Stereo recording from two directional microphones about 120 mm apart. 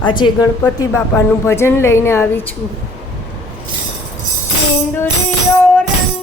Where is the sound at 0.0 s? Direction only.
40° left (ahead or behind); by 2.4 s 20° left (ahead or behind).